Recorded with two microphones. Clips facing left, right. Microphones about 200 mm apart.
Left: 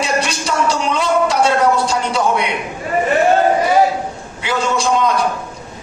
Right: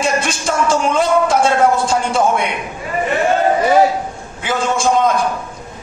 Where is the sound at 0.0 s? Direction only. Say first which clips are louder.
Right 1 dB; 50° right (ahead or behind).